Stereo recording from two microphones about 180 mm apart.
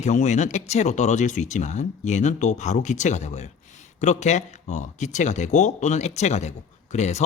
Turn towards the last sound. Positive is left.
turn(degrees=40)  # may be behind; listen again after turning